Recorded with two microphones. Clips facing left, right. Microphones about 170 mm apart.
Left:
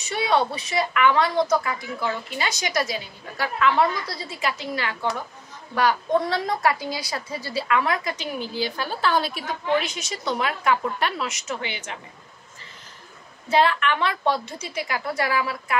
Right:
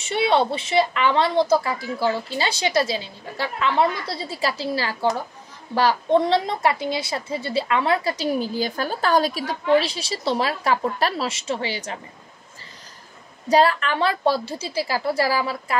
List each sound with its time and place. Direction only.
0.0 s a woman's voice: 30° right (ahead or behind)
13.5 s a woman's voice: 40° right (ahead or behind)